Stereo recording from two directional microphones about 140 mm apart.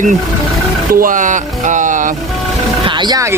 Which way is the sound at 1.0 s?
65° right (ahead or behind).